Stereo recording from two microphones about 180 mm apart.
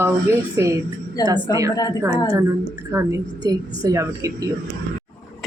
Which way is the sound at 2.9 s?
15° right (ahead or behind).